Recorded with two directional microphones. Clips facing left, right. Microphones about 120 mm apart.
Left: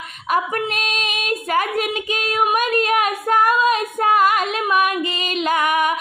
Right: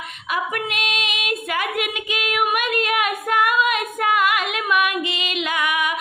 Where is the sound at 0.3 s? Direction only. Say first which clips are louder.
Left 4 dB; 40° left (ahead or behind).